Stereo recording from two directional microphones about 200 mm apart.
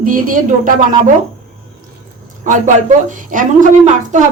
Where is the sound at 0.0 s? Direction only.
45° right (ahead or behind).